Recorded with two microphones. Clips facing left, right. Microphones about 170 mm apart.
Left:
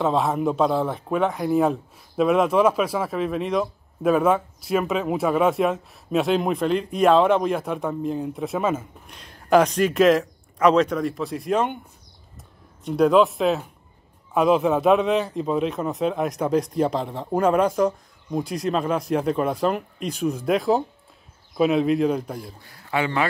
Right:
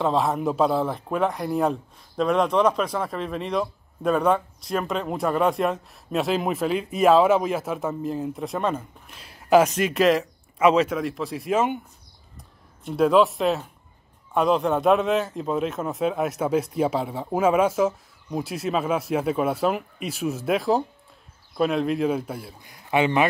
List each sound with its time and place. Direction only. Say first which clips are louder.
0.0 s speech: left 1 dB; centre (ahead or behind)
12.8 s speech: left 1 dB; centre (ahead or behind)
22.6 s a man's voice: right 4 dB; 15° right (ahead or behind)